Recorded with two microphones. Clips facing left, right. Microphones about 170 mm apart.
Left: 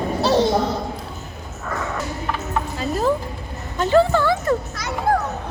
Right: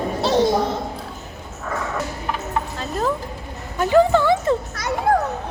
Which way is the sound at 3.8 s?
15° right (ahead or behind).